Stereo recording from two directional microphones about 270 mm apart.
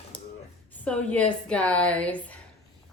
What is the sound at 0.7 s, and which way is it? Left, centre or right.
Speech, centre.